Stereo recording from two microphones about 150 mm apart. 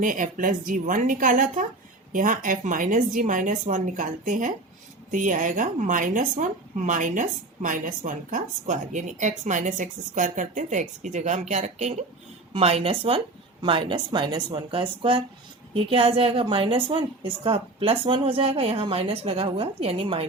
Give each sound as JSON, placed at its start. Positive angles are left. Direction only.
{"t": 0.0, "sound": "a woman's voice", "side_deg": -60}